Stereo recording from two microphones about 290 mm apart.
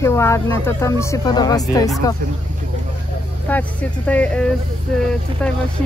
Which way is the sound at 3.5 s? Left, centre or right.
Centre.